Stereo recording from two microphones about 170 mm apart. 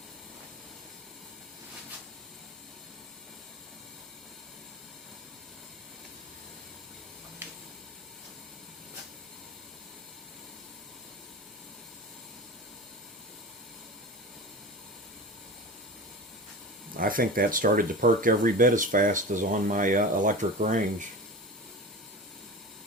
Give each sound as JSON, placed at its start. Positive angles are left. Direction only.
{"t": 17.0, "sound": "speech", "side_deg": -55}